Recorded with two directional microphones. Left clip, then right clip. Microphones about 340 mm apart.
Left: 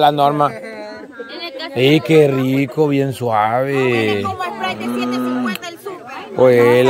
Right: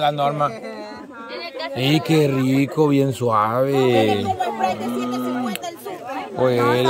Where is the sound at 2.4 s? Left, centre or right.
Centre.